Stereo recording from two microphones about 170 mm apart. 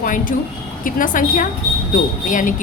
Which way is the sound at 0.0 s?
55° left (ahead or behind).